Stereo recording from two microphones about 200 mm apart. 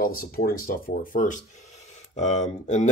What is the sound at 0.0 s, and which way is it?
Speech, 45° left (ahead or behind).